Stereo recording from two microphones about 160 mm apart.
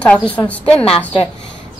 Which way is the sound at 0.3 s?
10° left (ahead or behind).